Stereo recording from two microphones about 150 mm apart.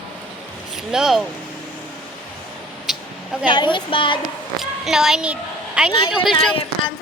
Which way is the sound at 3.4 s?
30° left (ahead or behind).